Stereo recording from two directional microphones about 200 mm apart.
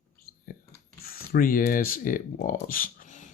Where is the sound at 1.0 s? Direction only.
50° left (ahead or behind).